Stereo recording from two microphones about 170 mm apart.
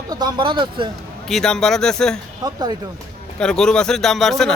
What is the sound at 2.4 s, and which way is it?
Speech, 25° right (ahead or behind).